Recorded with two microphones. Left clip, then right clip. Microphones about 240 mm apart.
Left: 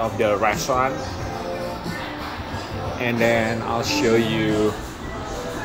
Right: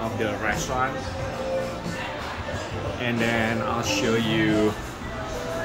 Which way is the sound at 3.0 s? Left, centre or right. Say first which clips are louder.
Left 5 dB; centre.